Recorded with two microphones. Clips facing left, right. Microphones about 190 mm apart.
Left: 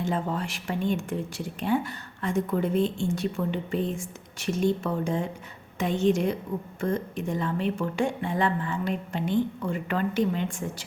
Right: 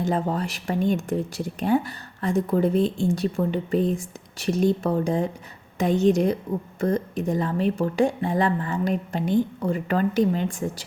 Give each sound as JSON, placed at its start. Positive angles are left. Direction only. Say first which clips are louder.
{"t": 0.0, "sound": "a woman's voice", "louder": "right 4 dB", "side_deg": -40}